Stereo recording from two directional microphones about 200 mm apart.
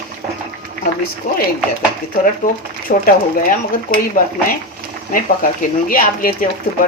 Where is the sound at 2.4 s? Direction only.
45° left (ahead or behind).